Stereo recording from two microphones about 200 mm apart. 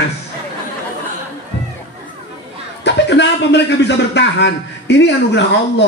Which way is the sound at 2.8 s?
60° left (ahead or behind).